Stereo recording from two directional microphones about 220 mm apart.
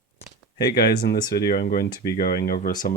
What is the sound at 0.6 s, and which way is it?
Speech, 45° left (ahead or behind).